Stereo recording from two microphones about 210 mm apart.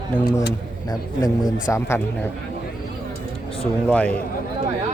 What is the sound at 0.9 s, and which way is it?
A man's voice, 20° left (ahead or behind).